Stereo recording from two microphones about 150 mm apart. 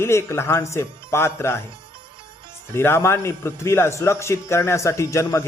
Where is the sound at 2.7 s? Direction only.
15° left (ahead or behind).